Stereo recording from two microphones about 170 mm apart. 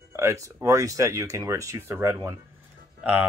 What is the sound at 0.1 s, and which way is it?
Speech, 15° right (ahead or behind).